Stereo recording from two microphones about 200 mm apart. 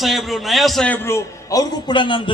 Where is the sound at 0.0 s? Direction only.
Centre (ahead or behind).